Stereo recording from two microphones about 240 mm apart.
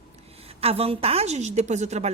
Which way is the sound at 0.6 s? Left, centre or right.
Right.